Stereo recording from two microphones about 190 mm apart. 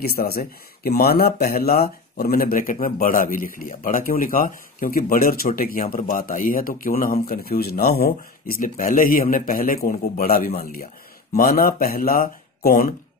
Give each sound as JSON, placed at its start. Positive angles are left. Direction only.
{"t": 0.0, "sound": "speech", "side_deg": 50}